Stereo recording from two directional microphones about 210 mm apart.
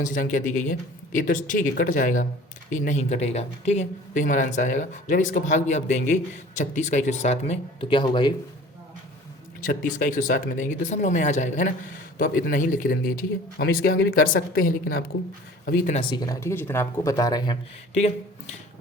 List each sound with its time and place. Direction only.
0.0 s speech: 40° left (ahead or behind); by 8.3 s 20° left (ahead or behind)
9.6 s speech: 40° left (ahead or behind)
16.0 s speech: 20° left (ahead or behind)
17.9 s speech: 30° left (ahead or behind)